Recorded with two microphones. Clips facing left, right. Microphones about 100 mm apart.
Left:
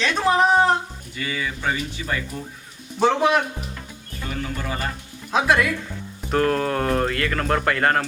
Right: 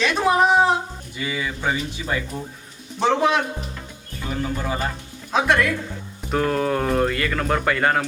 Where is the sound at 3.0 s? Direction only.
Centre (ahead or behind).